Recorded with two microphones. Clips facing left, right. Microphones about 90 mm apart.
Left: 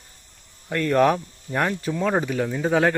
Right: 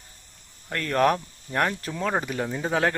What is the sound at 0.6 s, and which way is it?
Speech, 5° left (ahead or behind).